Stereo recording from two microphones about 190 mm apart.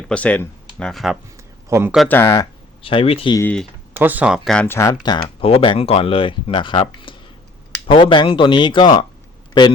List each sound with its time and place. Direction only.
0.1 s speech: 5° left (ahead or behind)
1.7 s speech: 10° right (ahead or behind)
2.0 s speech: 10° left (ahead or behind)
2.8 s speech: 30° left (ahead or behind)
3.3 s speech: 10° left (ahead or behind)
3.9 s speech: 10° right (ahead or behind); by 4.9 s 15° left (ahead or behind)
5.0 s speech: 25° left (ahead or behind)